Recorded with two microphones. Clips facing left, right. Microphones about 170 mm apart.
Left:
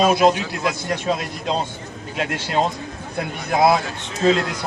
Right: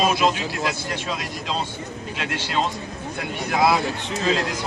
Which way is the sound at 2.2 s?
40° left (ahead or behind).